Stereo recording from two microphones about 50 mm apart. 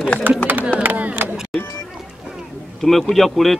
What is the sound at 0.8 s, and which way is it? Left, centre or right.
Speech, right.